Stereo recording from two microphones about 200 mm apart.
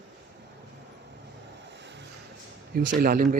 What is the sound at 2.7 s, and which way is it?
Speech, 45° right (ahead or behind).